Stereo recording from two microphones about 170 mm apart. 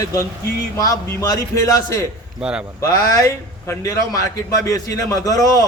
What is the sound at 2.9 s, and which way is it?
A man's voice, 20° left (ahead or behind).